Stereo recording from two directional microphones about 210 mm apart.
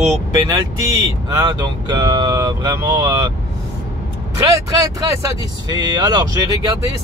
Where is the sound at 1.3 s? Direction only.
20° right (ahead or behind).